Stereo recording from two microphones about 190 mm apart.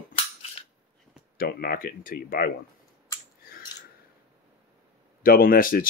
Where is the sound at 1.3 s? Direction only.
50° left (ahead or behind).